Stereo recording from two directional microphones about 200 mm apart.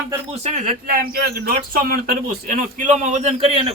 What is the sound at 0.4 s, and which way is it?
Speech, 35° right (ahead or behind).